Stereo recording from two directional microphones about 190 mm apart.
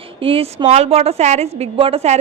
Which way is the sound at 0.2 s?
30° right (ahead or behind).